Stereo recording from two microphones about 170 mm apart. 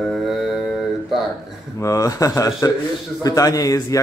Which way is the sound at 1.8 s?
20° left (ahead or behind).